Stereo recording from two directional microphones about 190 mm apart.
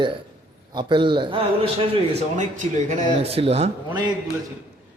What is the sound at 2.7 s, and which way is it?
Speech, 40° right (ahead or behind).